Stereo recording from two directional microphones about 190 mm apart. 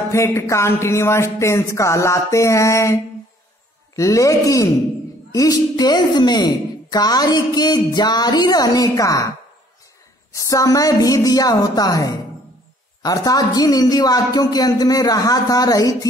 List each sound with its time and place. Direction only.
0.1 s a woman's voice: 15° left (ahead or behind)
10.3 s a woman's voice: 20° left (ahead or behind)